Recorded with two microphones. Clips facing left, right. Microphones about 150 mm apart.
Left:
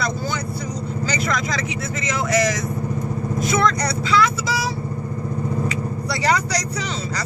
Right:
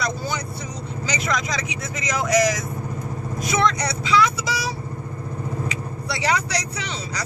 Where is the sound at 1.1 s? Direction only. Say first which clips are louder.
Even; 10° right (ahead or behind).